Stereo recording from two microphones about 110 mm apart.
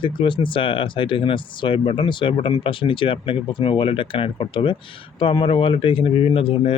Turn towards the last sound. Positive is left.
turn(degrees=55)  # may be behind; listen again after turning